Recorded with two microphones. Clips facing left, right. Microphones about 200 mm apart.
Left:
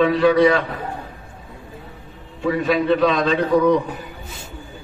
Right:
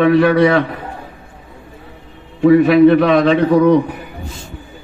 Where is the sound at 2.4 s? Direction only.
65° right (ahead or behind).